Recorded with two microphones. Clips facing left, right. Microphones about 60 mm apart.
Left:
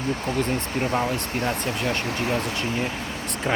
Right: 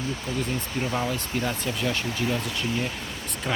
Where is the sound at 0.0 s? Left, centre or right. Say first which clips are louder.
Left 4 dB; left.